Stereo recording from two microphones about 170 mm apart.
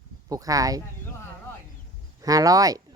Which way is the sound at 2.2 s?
20° right (ahead or behind).